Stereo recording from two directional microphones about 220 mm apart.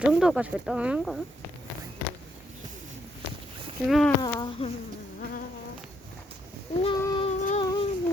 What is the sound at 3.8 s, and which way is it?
Speech, centre (ahead or behind).